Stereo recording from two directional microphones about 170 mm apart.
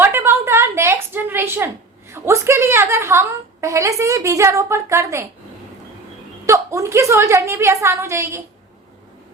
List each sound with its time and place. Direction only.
0.0 s a sound: 15° right (ahead or behind)
2.1 s a woman's voice: 15° right (ahead or behind)
6.4 s a woman's voice: 15° right (ahead or behind)